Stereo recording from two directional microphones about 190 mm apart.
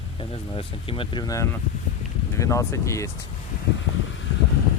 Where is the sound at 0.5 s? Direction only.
30° left (ahead or behind).